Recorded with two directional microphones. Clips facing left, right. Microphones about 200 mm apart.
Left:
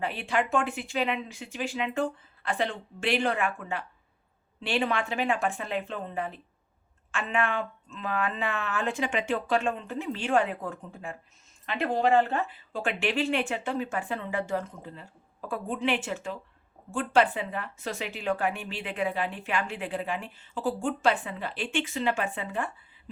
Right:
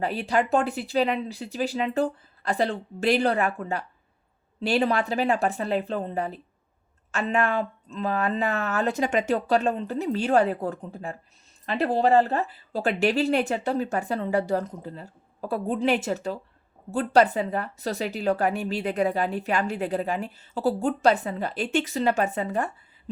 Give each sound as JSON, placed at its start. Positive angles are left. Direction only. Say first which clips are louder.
{"t": 0.0, "sound": "speech", "louder": "right 4 dB", "side_deg": -40}